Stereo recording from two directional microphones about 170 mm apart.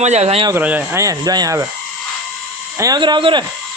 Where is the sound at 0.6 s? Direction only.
10° right (ahead or behind).